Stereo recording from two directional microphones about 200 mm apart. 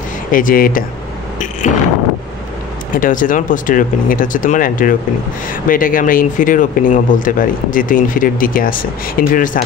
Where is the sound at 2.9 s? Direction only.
40° left (ahead or behind).